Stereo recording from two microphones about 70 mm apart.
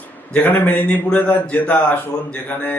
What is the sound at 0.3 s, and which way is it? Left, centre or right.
Mantra, left.